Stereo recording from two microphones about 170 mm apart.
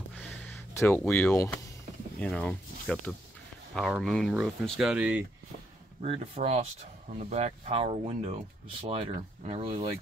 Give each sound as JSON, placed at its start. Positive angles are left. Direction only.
{"t": 0.1, "sound": "a sound", "side_deg": 10}
{"t": 2.1, "sound": "speech", "side_deg": 5}
{"t": 6.0, "sound": "speech", "side_deg": -35}